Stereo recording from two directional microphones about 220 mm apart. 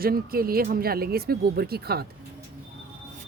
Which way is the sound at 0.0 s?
45° right (ahead or behind).